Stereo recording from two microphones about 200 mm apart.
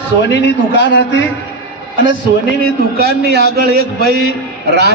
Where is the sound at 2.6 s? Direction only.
50° right (ahead or behind).